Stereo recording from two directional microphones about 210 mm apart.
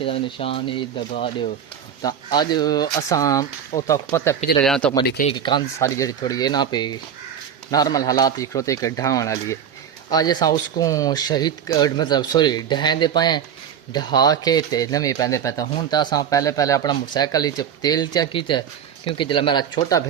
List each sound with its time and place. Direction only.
0.0 s speech: 25° left (ahead or behind); by 4.9 s 5° left (ahead or behind)
5.0 s speech: 45° left (ahead or behind)
5.4 s speech: 20° left (ahead or behind)